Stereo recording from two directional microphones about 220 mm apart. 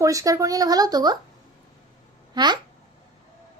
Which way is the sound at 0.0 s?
15° right (ahead or behind).